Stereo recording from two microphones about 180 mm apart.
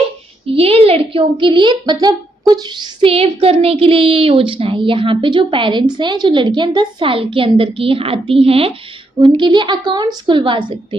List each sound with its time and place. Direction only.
0.4 s a woman's voice: 30° right (ahead or behind)